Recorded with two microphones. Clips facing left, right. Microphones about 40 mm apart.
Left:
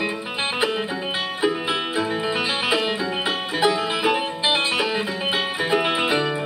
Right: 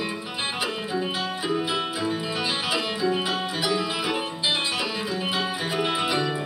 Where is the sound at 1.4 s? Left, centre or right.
Left.